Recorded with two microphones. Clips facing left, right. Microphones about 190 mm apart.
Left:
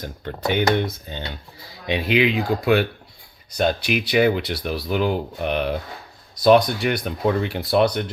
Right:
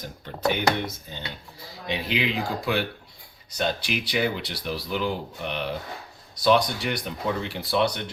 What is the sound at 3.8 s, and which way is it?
Speech, 60° left (ahead or behind).